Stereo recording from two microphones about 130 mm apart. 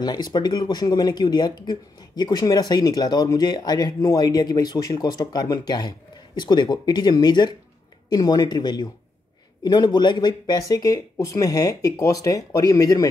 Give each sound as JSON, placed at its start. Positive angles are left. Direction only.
{"t": 0.0, "sound": "speech", "side_deg": 35}